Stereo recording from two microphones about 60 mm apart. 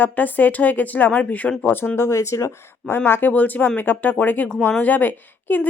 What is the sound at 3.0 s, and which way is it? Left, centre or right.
Speech, left.